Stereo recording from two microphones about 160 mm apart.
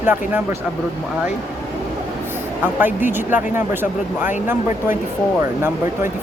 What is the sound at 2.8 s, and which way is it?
Speech, 10° right (ahead or behind).